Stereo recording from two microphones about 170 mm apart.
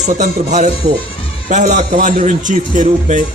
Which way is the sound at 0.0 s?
45° right (ahead or behind).